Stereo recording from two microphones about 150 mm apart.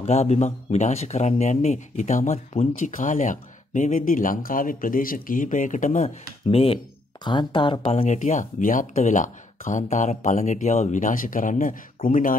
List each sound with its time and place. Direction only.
0.0 s speech: 45° left (ahead or behind); by 12.4 s 65° left (ahead or behind)